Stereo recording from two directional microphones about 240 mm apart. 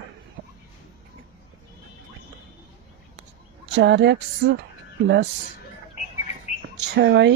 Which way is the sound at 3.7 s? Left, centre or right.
Right.